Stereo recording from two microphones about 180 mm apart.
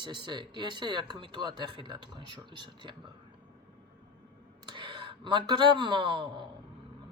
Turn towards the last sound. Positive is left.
turn(degrees=-25)  # may be behind; listen again after turning